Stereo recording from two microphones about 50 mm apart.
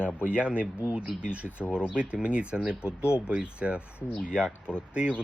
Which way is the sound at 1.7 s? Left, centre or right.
Right.